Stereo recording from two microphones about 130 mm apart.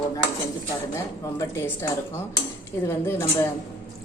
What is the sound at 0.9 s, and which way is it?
Speech, 20° left (ahead or behind).